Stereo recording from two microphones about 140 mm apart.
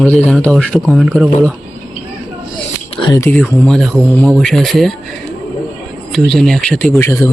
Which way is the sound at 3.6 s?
5° left (ahead or behind).